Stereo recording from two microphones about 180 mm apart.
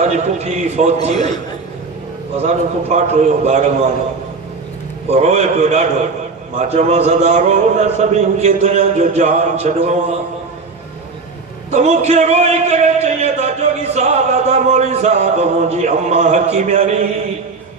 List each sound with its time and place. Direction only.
0.0 s a man's voice: 40° right (ahead or behind)
2.4 s a man's voice: 40° right (ahead or behind)
5.1 s a man's voice: 40° right (ahead or behind)
11.7 s a man's voice: 40° right (ahead or behind)